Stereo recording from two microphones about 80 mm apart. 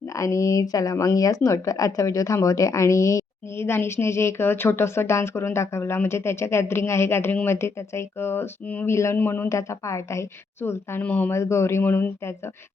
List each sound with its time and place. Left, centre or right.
0.2 s a woman's voice: left
9.1 s speech: left
9.5 s a woman's voice: left
11.0 s speech: centre
11.3 s a woman's voice: left